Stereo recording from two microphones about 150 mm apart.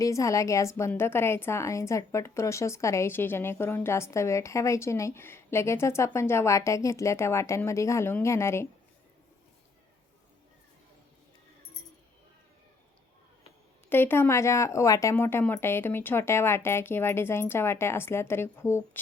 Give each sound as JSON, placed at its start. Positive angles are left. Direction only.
{"t": 0.0, "sound": "a woman's voice", "side_deg": 20}
{"t": 13.9, "sound": "speech", "side_deg": 15}